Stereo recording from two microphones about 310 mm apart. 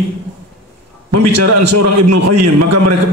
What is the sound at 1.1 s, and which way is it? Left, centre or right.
A man's voice, right.